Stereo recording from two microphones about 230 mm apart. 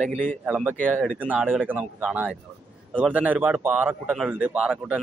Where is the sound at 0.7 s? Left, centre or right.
Centre.